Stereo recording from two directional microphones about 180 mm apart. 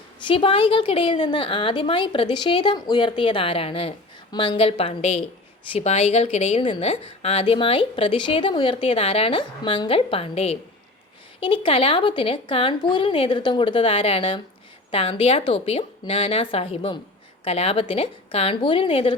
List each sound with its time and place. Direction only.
0.3 s a woman's voice: 30° left (ahead or behind)